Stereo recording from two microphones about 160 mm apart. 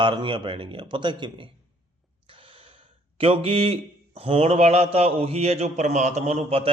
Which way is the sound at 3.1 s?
35° right (ahead or behind).